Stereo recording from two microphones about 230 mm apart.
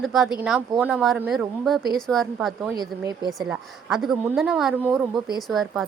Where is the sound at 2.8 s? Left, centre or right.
Centre.